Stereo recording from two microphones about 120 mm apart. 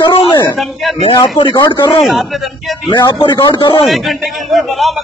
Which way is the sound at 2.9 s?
40° left (ahead or behind).